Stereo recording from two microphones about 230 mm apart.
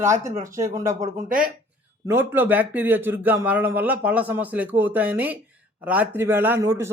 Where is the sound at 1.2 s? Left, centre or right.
Right.